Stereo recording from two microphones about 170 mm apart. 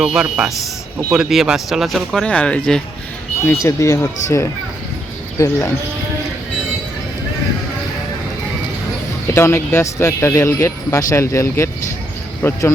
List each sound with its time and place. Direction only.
0.0 s speech: 5° right (ahead or behind)
3.4 s speech: 15° left (ahead or behind)
9.3 s speech: 15° left (ahead or behind)